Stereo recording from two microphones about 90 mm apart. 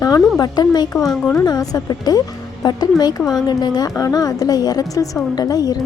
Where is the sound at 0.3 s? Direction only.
45° left (ahead or behind).